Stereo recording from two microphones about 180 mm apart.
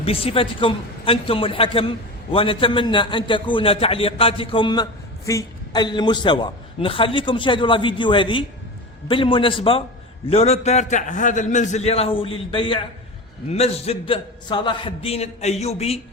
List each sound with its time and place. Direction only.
0.0 s a man's voice: 35° left (ahead or behind)